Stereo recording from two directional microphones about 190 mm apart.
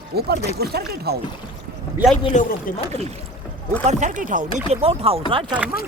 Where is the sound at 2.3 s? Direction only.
40° left (ahead or behind).